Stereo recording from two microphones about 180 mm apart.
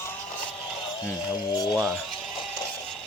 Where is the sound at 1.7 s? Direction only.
5° left (ahead or behind).